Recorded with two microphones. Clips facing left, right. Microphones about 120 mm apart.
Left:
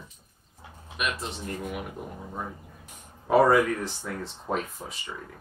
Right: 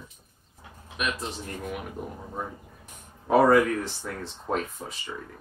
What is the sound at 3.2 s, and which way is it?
Speech, centre (ahead or behind).